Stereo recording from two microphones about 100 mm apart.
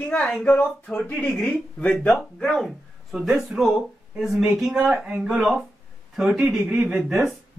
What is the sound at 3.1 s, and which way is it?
Speech, 5° right (ahead or behind).